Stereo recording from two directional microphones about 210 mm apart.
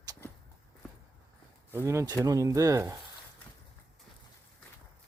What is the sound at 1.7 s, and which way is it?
Speech, 15° right (ahead or behind).